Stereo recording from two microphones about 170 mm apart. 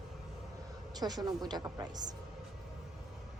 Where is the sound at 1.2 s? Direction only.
25° right (ahead or behind).